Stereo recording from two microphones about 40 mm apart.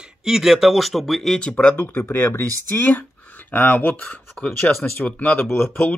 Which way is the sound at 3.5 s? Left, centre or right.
Left.